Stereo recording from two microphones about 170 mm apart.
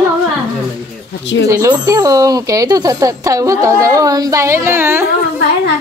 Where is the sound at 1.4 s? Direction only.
20° right (ahead or behind).